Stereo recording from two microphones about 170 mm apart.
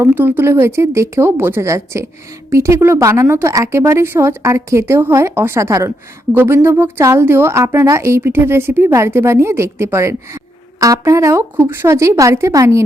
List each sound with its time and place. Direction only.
0.0 s a woman's voice: 10° right (ahead or behind)